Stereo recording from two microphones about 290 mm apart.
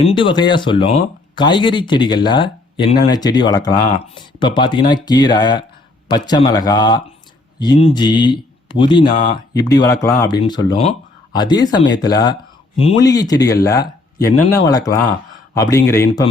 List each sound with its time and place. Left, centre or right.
0.0 s speech: centre